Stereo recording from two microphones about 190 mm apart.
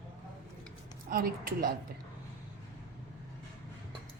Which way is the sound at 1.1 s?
50° right (ahead or behind).